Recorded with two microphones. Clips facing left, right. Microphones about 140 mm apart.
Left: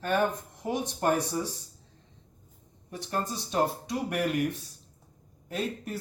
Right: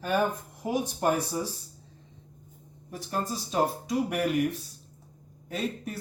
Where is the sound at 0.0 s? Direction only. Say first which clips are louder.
Even; 5° right (ahead or behind).